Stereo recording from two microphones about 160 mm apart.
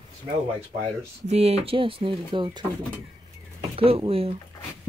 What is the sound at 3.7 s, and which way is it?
Speech, 35° right (ahead or behind).